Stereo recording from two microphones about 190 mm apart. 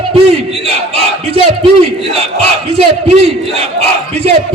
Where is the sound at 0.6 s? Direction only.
30° right (ahead or behind).